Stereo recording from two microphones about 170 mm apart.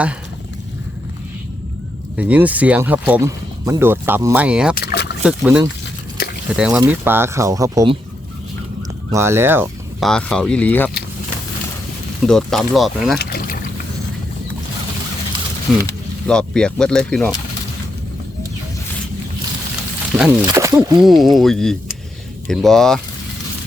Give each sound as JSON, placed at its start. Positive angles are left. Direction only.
{"t": 2.1, "sound": "speech", "side_deg": -10}
{"t": 4.9, "sound": "boat", "side_deg": 75}
{"t": 5.2, "sound": "speech", "side_deg": -5}
{"t": 9.1, "sound": "speech", "side_deg": -15}
{"t": 10.0, "sound": "speech", "side_deg": 5}
{"t": 12.2, "sound": "speech", "side_deg": 5}
{"t": 13.1, "sound": "boat", "side_deg": 65}
{"t": 15.7, "sound": "speech", "side_deg": 0}
{"t": 20.1, "sound": "speech", "side_deg": -5}
{"t": 20.4, "sound": "speech", "side_deg": -20}
{"t": 21.0, "sound": "speech", "side_deg": 0}